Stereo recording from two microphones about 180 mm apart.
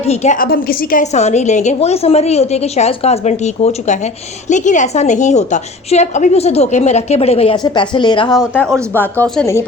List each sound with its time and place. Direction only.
0.0 s a woman's voice: 35° left (ahead or behind)
0.3 s a woman's voice: 55° left (ahead or behind); by 8.4 s 25° left (ahead or behind)
8.5 s speech: 5° left (ahead or behind)